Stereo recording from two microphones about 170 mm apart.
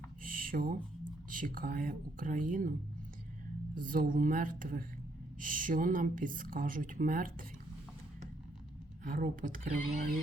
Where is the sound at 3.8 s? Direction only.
55° right (ahead or behind).